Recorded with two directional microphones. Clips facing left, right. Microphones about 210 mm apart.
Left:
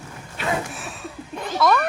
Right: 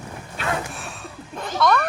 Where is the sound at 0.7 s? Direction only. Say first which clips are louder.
Left 1 dB; centre (ahead or behind).